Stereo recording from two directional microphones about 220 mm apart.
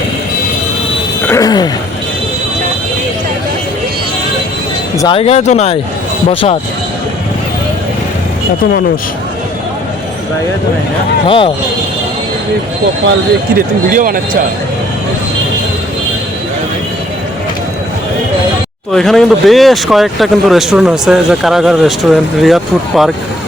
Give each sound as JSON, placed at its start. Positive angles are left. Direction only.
{"t": 1.3, "sound": "a sound", "side_deg": 15}
{"t": 4.9, "sound": "speech", "side_deg": 20}
{"t": 11.3, "sound": "speech", "side_deg": 25}
{"t": 13.9, "sound": "speech", "side_deg": -40}
{"t": 18.9, "sound": "speech", "side_deg": 0}